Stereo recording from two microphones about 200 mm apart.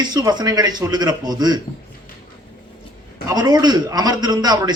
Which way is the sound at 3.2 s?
20° right (ahead or behind).